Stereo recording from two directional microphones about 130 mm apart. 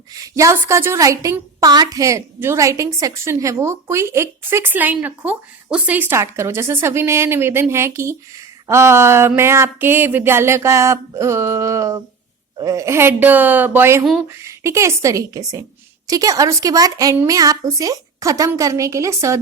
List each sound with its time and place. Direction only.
0.1 s a woman's voice: 25° right (ahead or behind)
14.0 s speech: centre (ahead or behind)
14.3 s a woman's voice: 20° right (ahead or behind)